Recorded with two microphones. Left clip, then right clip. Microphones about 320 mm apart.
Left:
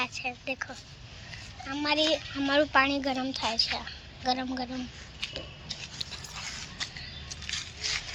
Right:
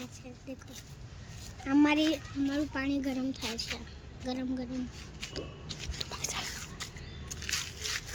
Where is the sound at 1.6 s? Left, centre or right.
Centre.